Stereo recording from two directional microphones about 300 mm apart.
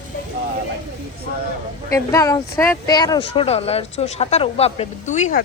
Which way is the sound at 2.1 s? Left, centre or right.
Centre.